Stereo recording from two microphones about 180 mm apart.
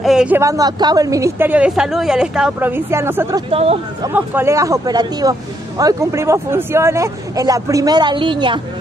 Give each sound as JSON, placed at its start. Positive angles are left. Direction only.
{"t": 0.0, "sound": "a sound", "side_deg": -5}
{"t": 0.4, "sound": "speech", "side_deg": -20}
{"t": 3.4, "sound": "speech", "side_deg": -35}
{"t": 4.1, "sound": "speech", "side_deg": -10}